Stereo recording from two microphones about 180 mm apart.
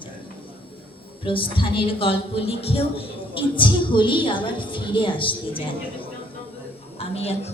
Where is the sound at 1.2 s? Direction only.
30° left (ahead or behind).